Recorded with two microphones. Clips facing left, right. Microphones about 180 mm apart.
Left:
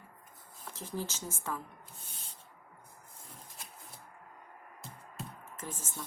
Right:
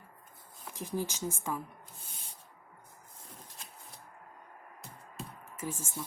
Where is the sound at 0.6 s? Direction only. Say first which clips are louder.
Right 3 dB; 15° right (ahead or behind).